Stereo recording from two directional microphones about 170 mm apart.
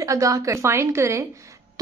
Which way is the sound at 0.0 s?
20° right (ahead or behind).